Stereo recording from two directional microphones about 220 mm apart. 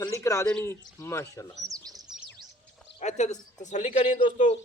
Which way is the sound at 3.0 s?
30° left (ahead or behind).